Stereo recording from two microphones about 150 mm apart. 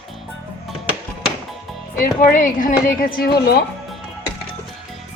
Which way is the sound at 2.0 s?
65° left (ahead or behind).